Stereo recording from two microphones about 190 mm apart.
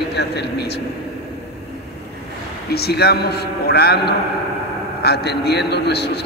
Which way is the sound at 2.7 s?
55° left (ahead or behind).